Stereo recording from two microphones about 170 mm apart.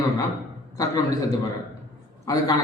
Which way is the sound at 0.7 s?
20° left (ahead or behind).